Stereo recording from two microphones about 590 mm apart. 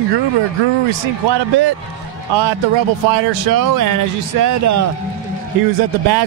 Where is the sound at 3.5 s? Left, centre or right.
Right.